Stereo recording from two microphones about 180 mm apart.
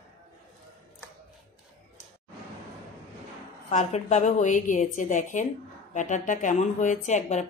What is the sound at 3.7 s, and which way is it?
Speech, 40° left (ahead or behind).